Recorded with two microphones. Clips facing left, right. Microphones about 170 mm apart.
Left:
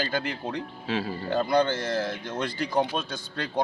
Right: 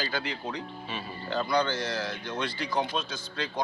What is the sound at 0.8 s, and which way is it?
Speech, 90° left.